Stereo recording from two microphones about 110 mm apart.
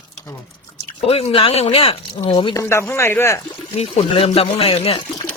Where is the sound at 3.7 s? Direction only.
65° left (ahead or behind).